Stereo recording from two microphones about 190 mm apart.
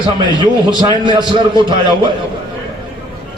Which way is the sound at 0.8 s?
25° right (ahead or behind).